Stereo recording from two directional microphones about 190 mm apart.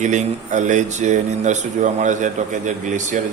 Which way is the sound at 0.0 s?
40° right (ahead or behind).